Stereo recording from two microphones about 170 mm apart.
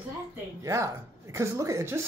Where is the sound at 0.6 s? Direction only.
15° right (ahead or behind).